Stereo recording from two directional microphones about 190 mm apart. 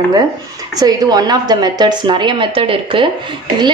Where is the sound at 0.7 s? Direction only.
20° right (ahead or behind).